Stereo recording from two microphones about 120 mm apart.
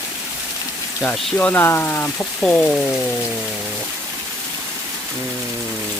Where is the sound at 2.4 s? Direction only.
10° left (ahead or behind).